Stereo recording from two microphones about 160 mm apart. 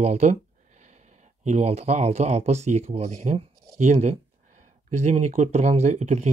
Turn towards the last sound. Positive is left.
turn(degrees=-45)  # may be behind; listen again after turning